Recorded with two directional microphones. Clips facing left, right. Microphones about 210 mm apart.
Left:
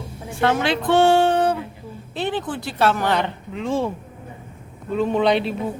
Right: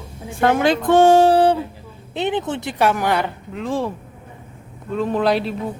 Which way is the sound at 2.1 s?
20° right (ahead or behind).